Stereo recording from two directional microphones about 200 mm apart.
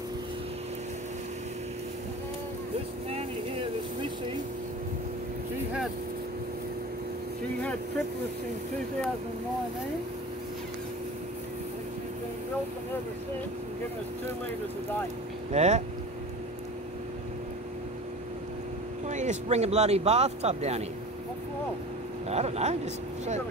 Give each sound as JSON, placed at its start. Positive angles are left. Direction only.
{"t": 3.1, "sound": "vehicle", "side_deg": -30}
{"t": 15.5, "sound": "speech", "side_deg": -35}
{"t": 19.0, "sound": "speech", "side_deg": -35}
{"t": 22.3, "sound": "speech", "side_deg": -30}